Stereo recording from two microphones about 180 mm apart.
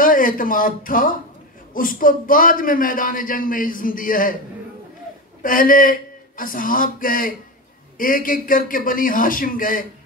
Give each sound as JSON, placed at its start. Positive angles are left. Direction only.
{"t": 0.0, "sound": "a man's voice", "side_deg": 50}
{"t": 5.4, "sound": "a man's voice", "side_deg": 50}